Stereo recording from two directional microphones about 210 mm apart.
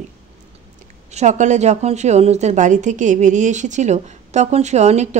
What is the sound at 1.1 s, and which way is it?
A woman's voice, 35° right (ahead or behind).